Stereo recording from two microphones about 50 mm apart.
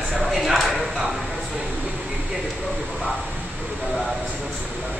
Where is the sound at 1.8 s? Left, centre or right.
Right.